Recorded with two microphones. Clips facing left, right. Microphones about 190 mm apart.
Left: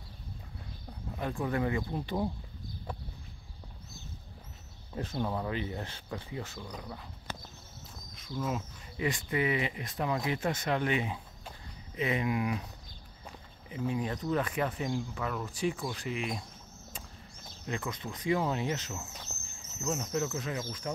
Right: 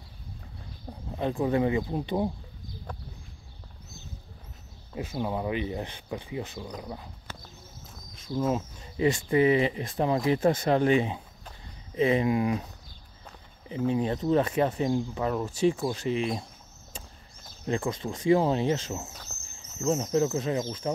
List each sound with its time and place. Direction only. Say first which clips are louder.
1.1 s speech: right 7 dB; 25° right (ahead or behind)
4.9 s speech: right 3 dB; 10° right (ahead or behind)
8.2 s speech: right 7 dB; 30° right (ahead or behind)
13.7 s speech: right 6 dB; 25° right (ahead or behind)
17.6 s speech: right 8 dB; 30° right (ahead or behind)